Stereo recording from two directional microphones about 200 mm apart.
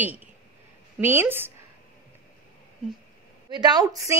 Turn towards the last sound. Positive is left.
turn(degrees=-20)  # may be behind; listen again after turning